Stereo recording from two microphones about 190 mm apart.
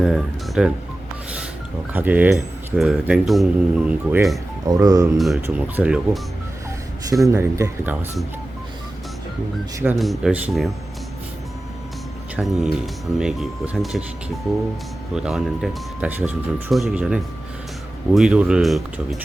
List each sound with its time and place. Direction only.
0.0 s speech: centre (ahead or behind)
1.9 s speech: 10° right (ahead or behind)
4.6 s speech: 20° right (ahead or behind)
5.1 s speech: centre (ahead or behind)
7.1 s speech: 15° right (ahead or behind)
10.0 s speech: centre (ahead or behind)
12.4 s speech: centre (ahead or behind)
15.1 s speech: centre (ahead or behind)